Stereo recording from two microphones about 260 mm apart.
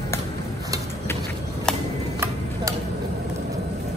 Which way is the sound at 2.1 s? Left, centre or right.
Centre.